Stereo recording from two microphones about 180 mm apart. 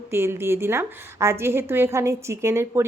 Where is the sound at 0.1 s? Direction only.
15° right (ahead or behind).